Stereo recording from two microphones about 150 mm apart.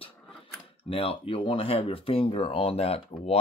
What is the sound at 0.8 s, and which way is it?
Speech, 35° left (ahead or behind).